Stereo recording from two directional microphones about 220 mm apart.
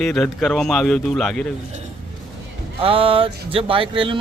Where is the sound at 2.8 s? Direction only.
25° right (ahead or behind).